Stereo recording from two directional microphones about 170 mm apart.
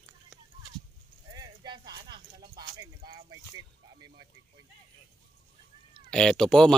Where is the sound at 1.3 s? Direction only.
25° right (ahead or behind).